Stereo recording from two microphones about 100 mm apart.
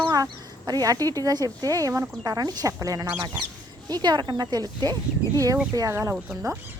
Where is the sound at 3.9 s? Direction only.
45° right (ahead or behind).